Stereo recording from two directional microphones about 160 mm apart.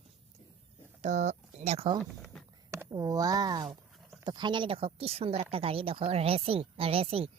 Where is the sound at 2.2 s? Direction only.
5° left (ahead or behind).